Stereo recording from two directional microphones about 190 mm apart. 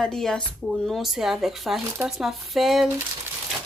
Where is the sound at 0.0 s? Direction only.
Centre (ahead or behind).